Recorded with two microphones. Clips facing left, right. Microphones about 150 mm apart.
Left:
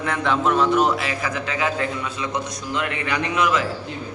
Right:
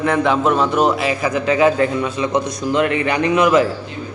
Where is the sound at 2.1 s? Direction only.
25° right (ahead or behind).